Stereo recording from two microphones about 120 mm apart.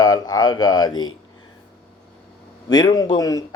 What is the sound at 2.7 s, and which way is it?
Speech, 35° left (ahead or behind).